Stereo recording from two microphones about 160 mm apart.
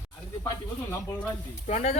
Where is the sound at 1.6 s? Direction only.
45° left (ahead or behind).